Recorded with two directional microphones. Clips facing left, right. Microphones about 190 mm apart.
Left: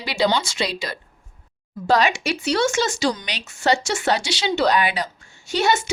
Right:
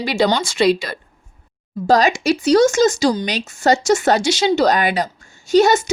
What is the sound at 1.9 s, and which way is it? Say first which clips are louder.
A woman's voice: right 5 dB; 40° right (ahead or behind).